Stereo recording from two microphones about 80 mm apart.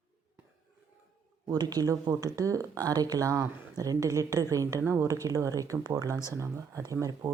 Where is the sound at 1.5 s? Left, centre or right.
Right.